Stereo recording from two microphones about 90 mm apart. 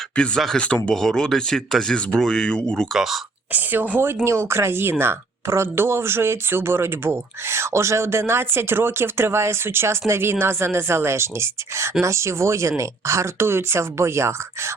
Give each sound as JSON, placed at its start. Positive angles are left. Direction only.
{"t": 0.2, "sound": "speech", "side_deg": 5}
{"t": 3.5, "sound": "speech", "side_deg": -20}